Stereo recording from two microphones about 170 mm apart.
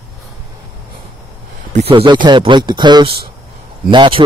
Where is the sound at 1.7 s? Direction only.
30° right (ahead or behind).